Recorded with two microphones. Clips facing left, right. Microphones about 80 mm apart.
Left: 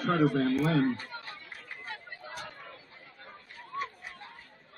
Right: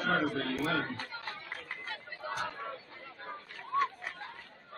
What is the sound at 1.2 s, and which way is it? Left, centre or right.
Chatter, right.